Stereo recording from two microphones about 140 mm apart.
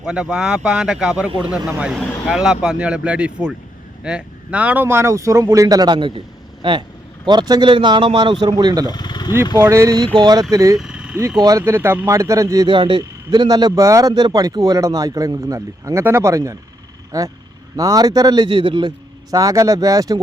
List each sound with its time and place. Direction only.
0.0 s speech: 5° right (ahead or behind); by 8.9 s 30° right (ahead or behind)
8.9 s vehicle: 30° left (ahead or behind)
9.6 s speech: 20° right (ahead or behind)
10.8 s vehicle: 5° right (ahead or behind)
11.3 s speech: 25° right (ahead or behind)
12.6 s speech: 35° right (ahead or behind)